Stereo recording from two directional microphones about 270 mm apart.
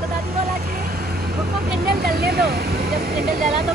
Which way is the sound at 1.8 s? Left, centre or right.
Right.